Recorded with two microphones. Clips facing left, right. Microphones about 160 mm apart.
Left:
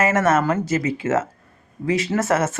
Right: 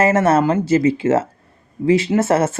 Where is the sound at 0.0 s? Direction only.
30° right (ahead or behind).